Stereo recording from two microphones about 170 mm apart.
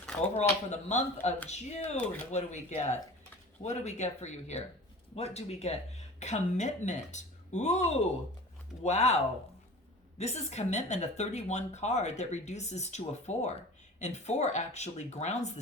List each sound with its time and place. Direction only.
0.2 s speech: 40° left (ahead or behind)
10.2 s speech: 40° left (ahead or behind)